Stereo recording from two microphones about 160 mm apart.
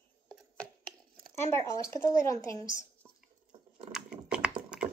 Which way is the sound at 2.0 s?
20° left (ahead or behind).